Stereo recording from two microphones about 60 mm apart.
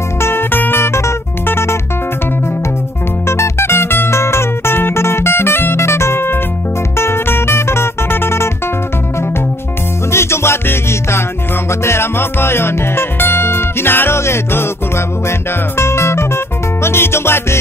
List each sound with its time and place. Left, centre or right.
0.2 s music: left
3.3 s music: left
10.1 s music: left